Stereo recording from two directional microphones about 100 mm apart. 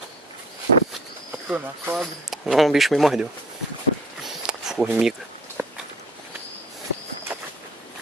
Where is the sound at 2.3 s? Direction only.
Centre (ahead or behind).